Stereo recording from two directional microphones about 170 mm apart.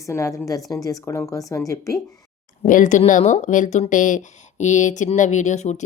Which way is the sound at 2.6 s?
50° left (ahead or behind).